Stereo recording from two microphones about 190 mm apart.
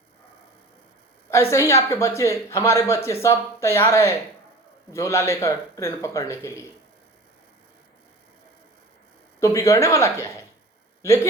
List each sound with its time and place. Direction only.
1.3 s speech: 15° left (ahead or behind)
9.4 s a man's voice: 15° left (ahead or behind)